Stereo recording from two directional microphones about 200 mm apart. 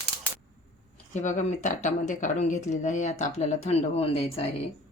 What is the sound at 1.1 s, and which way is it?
Speech, 35° left (ahead or behind).